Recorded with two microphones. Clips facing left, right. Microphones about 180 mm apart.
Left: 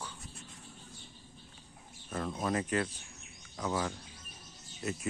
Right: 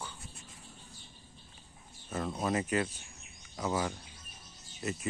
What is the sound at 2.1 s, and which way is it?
Speech, 5° right (ahead or behind).